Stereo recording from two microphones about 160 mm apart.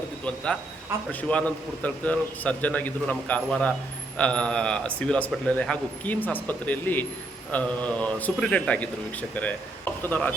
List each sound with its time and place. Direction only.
1.3 s a man's voice: 10° left (ahead or behind)